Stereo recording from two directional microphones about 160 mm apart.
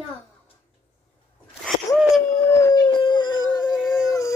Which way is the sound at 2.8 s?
30° left (ahead or behind).